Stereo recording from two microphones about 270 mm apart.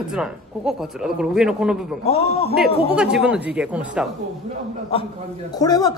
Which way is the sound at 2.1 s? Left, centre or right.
Left.